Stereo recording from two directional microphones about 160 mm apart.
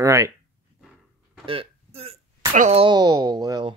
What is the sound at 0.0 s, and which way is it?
Speech, 20° right (ahead or behind).